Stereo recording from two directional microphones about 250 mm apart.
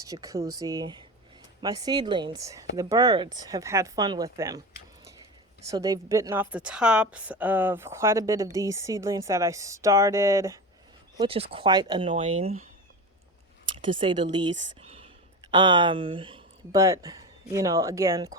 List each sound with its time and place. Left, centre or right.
0.0 s a woman's voice: centre
5.6 s a woman's voice: centre
11.2 s speech: right
13.8 s speech: centre